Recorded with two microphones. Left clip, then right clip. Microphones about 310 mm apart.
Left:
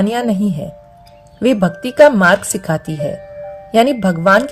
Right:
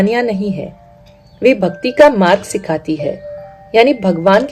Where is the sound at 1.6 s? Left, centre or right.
Left.